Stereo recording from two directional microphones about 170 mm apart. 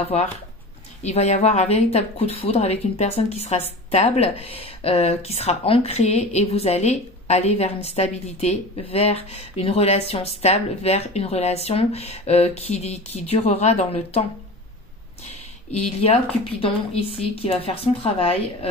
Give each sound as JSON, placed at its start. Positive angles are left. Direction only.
{"t": 1.0, "sound": "a woman's voice", "side_deg": 40}
{"t": 15.2, "sound": "a woman's voice", "side_deg": 40}